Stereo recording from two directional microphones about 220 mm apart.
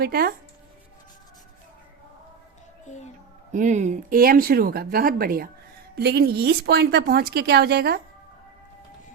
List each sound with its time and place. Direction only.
0.0 s speech: 45° right (ahead or behind)
2.8 s a sound: 30° left (ahead or behind)
3.5 s speech: 35° right (ahead or behind)